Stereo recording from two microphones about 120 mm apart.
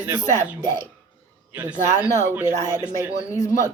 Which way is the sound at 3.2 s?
30° left (ahead or behind).